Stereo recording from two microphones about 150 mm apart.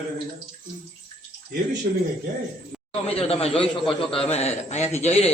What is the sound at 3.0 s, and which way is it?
A man's voice, 40° left (ahead or behind).